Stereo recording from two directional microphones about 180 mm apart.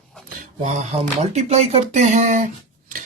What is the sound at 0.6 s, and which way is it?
Speech, 40° right (ahead or behind).